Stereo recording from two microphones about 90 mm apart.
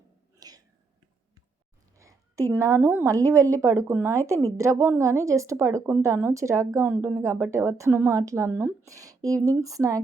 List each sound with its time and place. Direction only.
0.3 s whispering: 45° right (ahead or behind)
2.0 s a sound: 35° right (ahead or behind)
2.6 s speech: 30° right (ahead or behind)
8.9 s speech: 40° right (ahead or behind)